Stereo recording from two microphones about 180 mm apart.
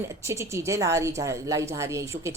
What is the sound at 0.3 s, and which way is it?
Speech, 15° right (ahead or behind).